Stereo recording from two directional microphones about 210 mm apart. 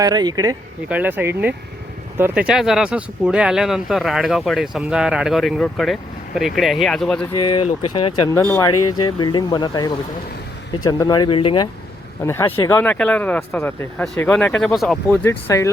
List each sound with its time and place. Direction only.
0.0 s speech: 20° right (ahead or behind)
0.9 s speech: 10° right (ahead or behind)
7.3 s speech: 20° left (ahead or behind)
8.7 s speech: 90° left
9.0 s speech: 20° left (ahead or behind)
12.2 s speech: 10° left (ahead or behind)